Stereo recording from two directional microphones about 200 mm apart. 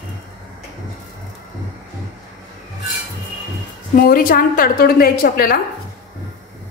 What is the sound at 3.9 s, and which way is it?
A woman's voice, 45° left (ahead or behind).